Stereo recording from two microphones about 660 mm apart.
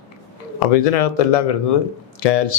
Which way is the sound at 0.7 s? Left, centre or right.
Left.